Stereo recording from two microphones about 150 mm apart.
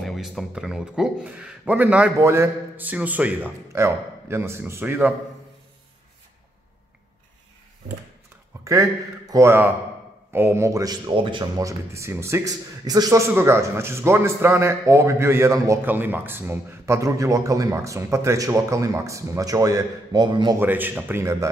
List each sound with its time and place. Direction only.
0.0 s a man's voice: centre (ahead or behind)
9.3 s a man's voice: 15° right (ahead or behind)
20.5 s a man's voice: 15° right (ahead or behind)